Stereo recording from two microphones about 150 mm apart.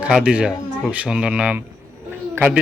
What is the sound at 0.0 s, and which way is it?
A man's voice, 5° right (ahead or behind).